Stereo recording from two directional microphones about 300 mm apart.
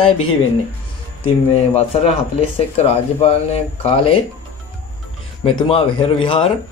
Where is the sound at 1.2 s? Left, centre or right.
Centre.